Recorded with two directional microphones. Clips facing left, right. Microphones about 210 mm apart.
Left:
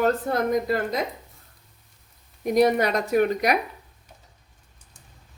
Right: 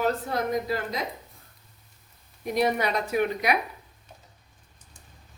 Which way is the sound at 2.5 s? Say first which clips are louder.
Left 5 dB; 45° left (ahead or behind).